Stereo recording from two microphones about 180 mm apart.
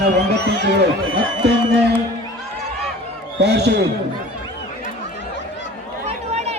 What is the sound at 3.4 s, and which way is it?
Speech, 70° right (ahead or behind).